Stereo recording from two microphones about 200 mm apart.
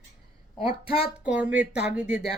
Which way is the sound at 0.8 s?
25° left (ahead or behind).